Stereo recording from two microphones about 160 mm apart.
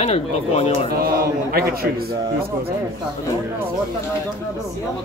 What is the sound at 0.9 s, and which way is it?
A man's voice, 70° right (ahead or behind).